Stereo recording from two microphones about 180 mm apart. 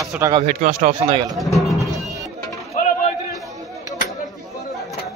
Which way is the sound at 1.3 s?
Centre (ahead or behind).